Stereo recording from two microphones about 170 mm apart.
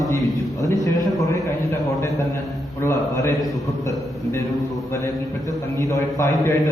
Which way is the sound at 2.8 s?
15° left (ahead or behind).